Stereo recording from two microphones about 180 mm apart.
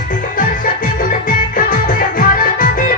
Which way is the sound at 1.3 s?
50° left (ahead or behind).